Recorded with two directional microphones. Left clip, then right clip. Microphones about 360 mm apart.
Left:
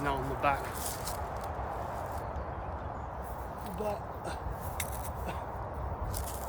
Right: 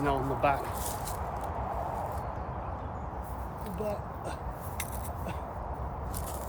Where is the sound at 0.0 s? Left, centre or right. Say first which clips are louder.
Right 3 dB; centre.